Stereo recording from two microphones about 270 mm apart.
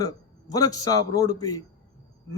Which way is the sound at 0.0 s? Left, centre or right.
Centre.